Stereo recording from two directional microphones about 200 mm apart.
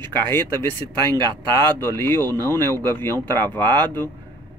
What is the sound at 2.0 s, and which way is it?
Speech, 10° left (ahead or behind).